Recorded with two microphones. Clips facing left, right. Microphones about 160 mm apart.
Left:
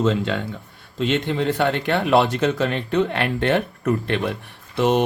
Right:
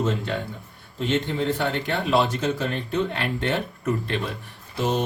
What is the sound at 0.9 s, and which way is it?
A man's voice, 75° left (ahead or behind).